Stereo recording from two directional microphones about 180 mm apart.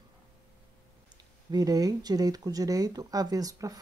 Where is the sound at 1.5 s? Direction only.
20° right (ahead or behind).